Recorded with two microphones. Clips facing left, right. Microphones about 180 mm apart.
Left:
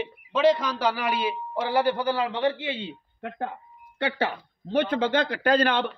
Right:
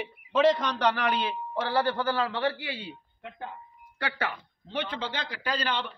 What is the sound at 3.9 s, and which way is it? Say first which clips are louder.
Speech: left 6 dB; 25° left (ahead or behind).